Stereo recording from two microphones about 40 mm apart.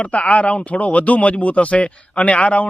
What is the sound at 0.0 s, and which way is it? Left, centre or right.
Speech, left.